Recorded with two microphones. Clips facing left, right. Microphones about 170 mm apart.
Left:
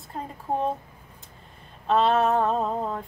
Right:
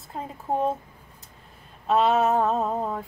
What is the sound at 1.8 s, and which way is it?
A woman's voice, 5° right (ahead or behind).